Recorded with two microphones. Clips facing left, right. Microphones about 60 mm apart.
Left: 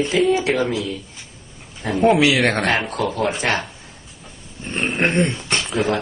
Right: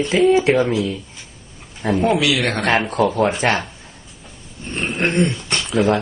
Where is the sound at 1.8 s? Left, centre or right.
Centre.